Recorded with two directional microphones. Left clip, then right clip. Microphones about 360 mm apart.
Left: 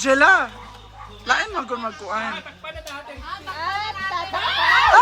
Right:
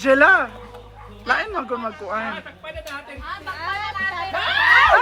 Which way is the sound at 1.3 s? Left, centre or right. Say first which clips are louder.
Even; centre.